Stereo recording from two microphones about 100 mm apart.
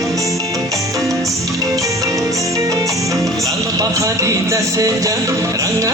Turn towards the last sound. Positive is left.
turn(degrees=-35)  # may be behind; listen again after turning